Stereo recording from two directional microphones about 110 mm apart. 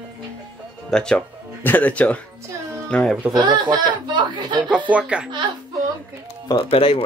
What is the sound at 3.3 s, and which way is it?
Speech, 40° right (ahead or behind).